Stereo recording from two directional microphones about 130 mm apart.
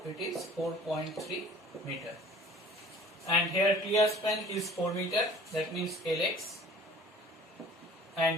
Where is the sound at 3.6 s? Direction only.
25° left (ahead or behind).